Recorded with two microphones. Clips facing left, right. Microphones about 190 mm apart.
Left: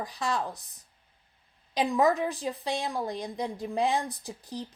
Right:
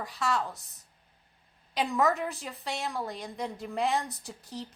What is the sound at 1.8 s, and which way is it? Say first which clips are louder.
A woman's voice: left 3 dB; 15° left (ahead or behind).